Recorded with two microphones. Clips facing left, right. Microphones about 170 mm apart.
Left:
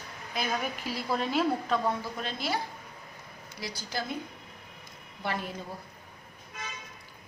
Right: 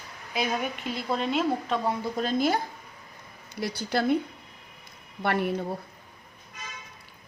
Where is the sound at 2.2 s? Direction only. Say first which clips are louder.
Right 8 dB; 45° right (ahead or behind).